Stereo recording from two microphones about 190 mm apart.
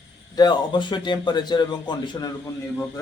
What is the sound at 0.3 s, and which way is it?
A man's voice, 25° left (ahead or behind).